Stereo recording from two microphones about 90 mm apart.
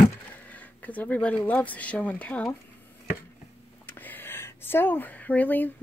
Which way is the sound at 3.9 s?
20° left (ahead or behind).